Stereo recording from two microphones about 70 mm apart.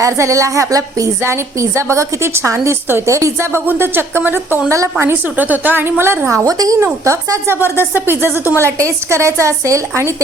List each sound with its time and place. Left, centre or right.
0.0 s a woman's voice: right
1.2 s a woman's voice: right
3.7 s speech: right
4.7 s a woman's voice: right
5.4 s speech: right
6.4 s speech: right
6.8 s speech: right
8.6 s a woman's voice: right